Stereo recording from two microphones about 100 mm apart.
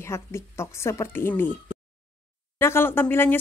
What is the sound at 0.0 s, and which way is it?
Speech, 25° left (ahead or behind).